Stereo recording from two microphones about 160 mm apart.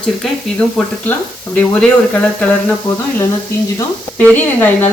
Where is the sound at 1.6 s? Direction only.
10° left (ahead or behind).